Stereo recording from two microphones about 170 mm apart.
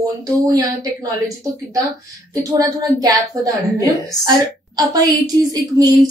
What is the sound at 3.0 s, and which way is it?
A woman's voice, 20° right (ahead or behind).